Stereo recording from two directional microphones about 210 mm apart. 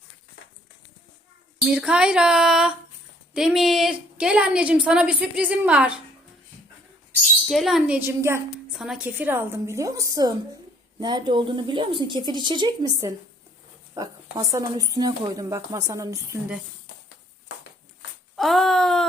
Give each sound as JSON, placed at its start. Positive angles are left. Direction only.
{"t": 1.6, "sound": "a woman's voice", "side_deg": -5}
{"t": 7.4, "sound": "a woman's voice", "side_deg": 0}
{"t": 18.3, "sound": "a woman's voice", "side_deg": 0}